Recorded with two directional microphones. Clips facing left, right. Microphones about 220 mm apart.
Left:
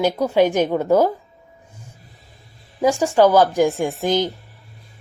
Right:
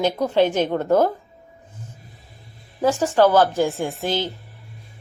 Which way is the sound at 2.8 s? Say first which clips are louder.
Left 2 dB; 10° left (ahead or behind).